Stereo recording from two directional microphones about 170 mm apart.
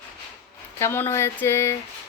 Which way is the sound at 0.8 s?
15° left (ahead or behind).